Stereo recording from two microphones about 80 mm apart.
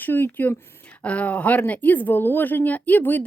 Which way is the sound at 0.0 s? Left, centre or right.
Left.